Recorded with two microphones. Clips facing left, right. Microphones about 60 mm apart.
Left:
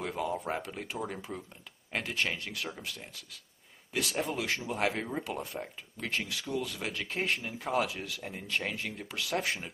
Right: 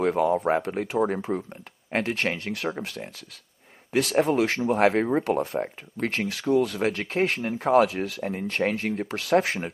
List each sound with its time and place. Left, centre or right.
0.0 s speech: right
3.9 s speech: right